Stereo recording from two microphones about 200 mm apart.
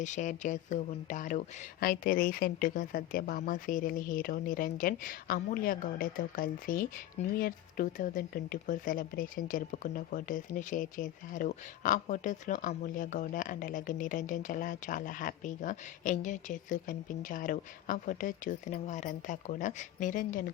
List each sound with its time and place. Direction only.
0.0 s speech: 35° left (ahead or behind)